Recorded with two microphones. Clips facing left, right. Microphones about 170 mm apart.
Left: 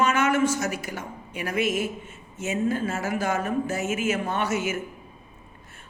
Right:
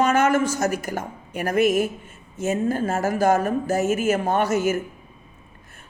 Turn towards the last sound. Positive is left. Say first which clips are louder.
# right 6 dB
turn(degrees=-40)  # may be behind; listen again after turning